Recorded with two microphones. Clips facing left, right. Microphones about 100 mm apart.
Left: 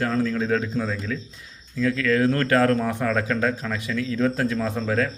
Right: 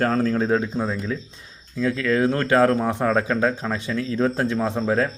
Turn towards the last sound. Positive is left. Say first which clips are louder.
# right 2 dB
turn(degrees=-25)  # may be behind; listen again after turning